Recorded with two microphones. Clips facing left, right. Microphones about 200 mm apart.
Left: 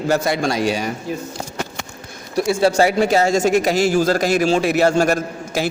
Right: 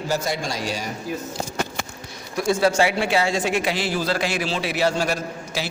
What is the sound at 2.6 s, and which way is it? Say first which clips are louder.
A man's voice: left 6 dB; 35° left (ahead or behind).